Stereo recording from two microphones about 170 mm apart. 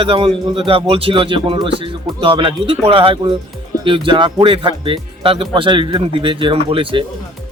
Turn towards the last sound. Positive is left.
turn(degrees=-30)  # may be behind; listen again after turning